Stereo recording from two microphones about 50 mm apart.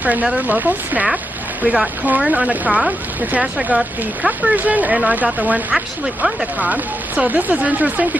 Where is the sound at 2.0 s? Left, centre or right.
Right.